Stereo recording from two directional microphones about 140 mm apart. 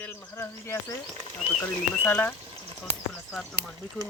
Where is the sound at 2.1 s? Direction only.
10° left (ahead or behind).